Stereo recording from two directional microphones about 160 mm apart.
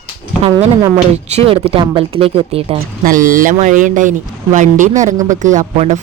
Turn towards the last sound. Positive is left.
turn(degrees=-40)  # may be behind; listen again after turning